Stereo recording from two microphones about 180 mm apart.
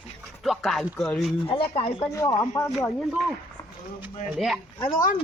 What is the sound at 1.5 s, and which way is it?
Speech, 30° left (ahead or behind).